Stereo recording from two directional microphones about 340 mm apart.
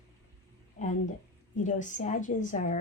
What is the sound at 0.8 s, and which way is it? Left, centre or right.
A woman's voice, left.